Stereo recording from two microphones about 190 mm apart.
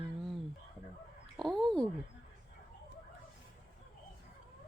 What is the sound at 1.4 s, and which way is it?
Speech, centre (ahead or behind).